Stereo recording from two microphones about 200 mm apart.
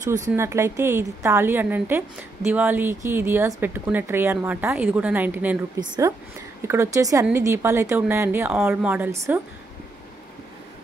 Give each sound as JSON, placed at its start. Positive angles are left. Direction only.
{"t": 0.3, "sound": "a woman's voice", "side_deg": -15}